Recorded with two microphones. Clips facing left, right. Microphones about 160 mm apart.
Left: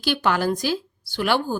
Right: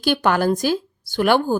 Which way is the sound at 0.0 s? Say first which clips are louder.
Right 4 dB; 50° right (ahead or behind).